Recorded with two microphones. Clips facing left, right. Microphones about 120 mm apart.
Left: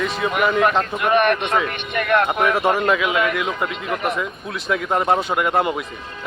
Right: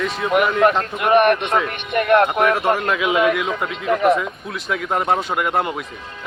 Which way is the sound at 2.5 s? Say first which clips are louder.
Left 1 dB; centre (ahead or behind).